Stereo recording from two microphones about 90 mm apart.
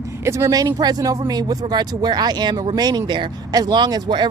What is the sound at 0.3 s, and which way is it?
Speech, 35° right (ahead or behind).